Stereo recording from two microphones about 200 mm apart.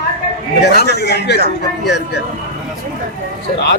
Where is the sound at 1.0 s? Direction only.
55° left (ahead or behind).